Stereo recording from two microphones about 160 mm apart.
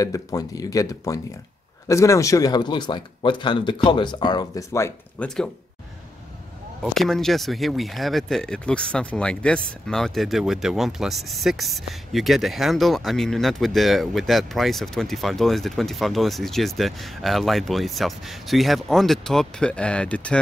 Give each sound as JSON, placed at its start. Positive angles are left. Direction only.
{"t": 0.0, "sound": "speech", "side_deg": 20}
{"t": 6.8, "sound": "speech", "side_deg": 0}